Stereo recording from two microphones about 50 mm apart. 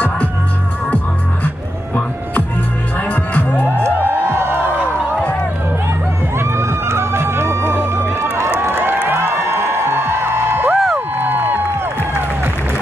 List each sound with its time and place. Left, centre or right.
0.8 s music: left
3.0 s music: left
3.8 s music: right
6.3 s music: right
8.7 s crowd: right
9.1 s music: right